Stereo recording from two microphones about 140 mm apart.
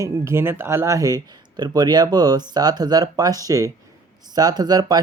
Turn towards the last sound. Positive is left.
turn(degrees=-30)  # may be behind; listen again after turning